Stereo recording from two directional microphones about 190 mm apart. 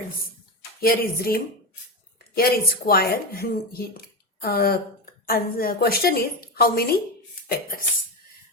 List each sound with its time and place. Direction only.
0.8 s speech: 50° left (ahead or behind)